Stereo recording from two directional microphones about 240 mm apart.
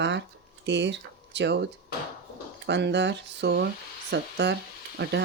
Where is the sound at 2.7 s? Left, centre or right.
Right.